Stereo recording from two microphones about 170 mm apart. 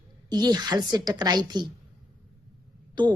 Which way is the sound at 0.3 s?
25° right (ahead or behind).